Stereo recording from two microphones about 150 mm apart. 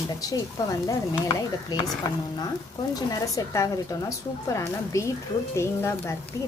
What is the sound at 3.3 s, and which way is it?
Speech, 20° left (ahead or behind).